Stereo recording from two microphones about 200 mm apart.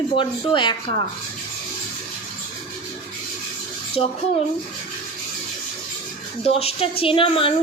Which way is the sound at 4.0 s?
30° left (ahead or behind).